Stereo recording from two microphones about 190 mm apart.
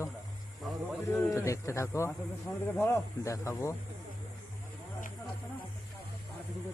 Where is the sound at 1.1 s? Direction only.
10° left (ahead or behind).